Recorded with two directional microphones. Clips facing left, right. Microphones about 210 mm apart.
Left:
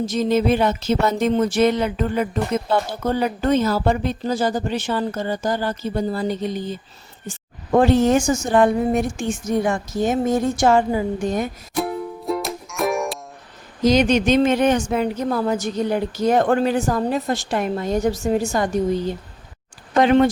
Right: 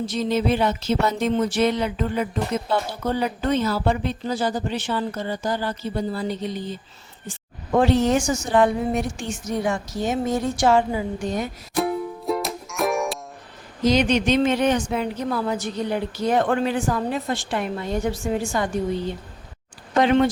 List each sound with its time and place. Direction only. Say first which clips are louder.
0.0 s a woman's voice: left 4 dB; 45° left (ahead or behind)
11.8 s music: right 1 dB; centre (ahead or behind)
13.8 s a woman's voice: left 3 dB; 45° left (ahead or behind)